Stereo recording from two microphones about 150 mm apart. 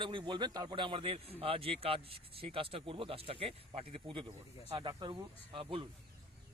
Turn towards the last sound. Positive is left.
turn(degrees=-35)  # may be behind; listen again after turning